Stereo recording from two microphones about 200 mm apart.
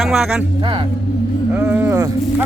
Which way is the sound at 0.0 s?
5° right (ahead or behind).